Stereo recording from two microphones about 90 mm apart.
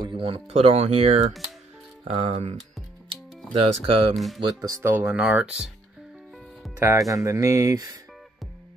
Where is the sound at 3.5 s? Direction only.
90° right.